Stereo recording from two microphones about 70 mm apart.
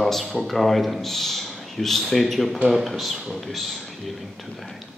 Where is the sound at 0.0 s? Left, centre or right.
Centre.